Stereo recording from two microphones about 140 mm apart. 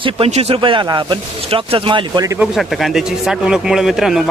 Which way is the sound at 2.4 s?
Centre (ahead or behind).